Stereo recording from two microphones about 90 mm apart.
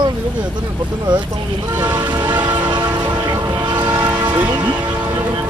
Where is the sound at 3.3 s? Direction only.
25° right (ahead or behind).